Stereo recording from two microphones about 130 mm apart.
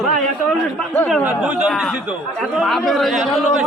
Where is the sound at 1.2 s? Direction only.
10° right (ahead or behind).